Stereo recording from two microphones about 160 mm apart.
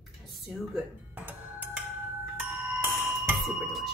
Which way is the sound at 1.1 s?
10° right (ahead or behind).